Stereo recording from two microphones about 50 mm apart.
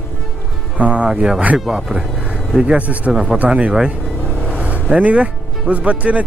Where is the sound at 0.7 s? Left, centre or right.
Right.